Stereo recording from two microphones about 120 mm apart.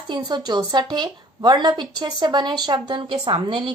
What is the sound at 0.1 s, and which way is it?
A woman's voice, 35° right (ahead or behind).